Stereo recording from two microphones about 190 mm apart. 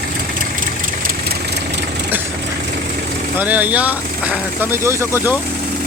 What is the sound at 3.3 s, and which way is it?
Speech, 10° right (ahead or behind).